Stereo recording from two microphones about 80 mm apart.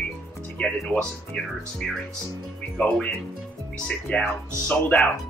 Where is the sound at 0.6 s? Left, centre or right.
Centre.